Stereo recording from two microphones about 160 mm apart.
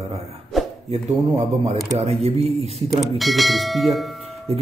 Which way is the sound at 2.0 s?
40° right (ahead or behind).